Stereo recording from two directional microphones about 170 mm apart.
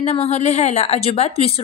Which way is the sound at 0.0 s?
35° left (ahead or behind).